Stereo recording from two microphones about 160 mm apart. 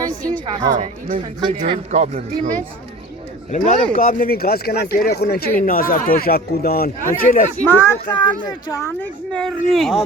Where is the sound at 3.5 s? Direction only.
50° left (ahead or behind).